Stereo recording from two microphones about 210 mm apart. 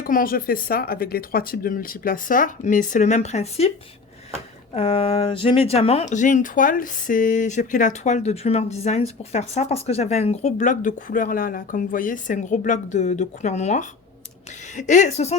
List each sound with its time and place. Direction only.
0.0 s speech: 40° left (ahead or behind)
4.7 s speech: 25° left (ahead or behind)